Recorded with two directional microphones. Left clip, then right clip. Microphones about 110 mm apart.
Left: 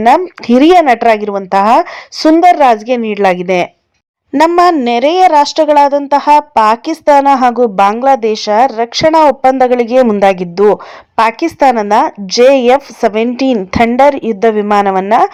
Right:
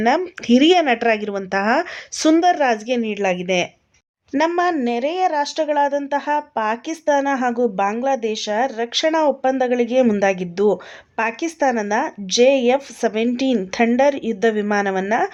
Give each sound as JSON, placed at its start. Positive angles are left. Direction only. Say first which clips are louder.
{"t": 0.0, "sound": "a woman's voice", "louder": "left 10 dB", "side_deg": 25}
{"t": 4.3, "sound": "a woman's voice", "louder": "left 11 dB", "side_deg": 55}